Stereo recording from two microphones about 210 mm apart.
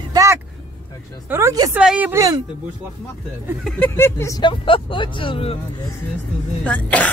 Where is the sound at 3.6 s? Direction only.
5° left (ahead or behind); by 5.6 s 25° left (ahead or behind).